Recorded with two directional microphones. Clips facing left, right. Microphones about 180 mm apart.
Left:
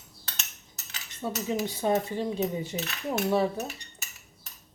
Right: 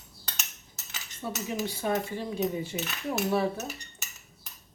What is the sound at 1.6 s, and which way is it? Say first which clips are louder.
Speech: left 2 dB; 20° left (ahead or behind).